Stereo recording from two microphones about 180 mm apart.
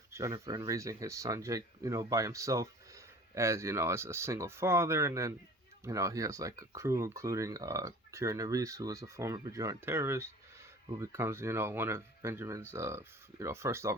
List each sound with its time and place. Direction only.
0.1 s speech: 15° right (ahead or behind)